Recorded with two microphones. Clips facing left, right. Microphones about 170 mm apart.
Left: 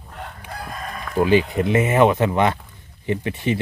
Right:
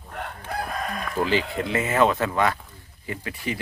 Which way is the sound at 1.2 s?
20° left (ahead or behind).